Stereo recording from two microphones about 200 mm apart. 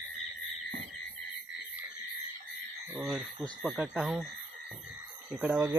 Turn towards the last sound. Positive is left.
turn(degrees=-5)  # may be behind; listen again after turning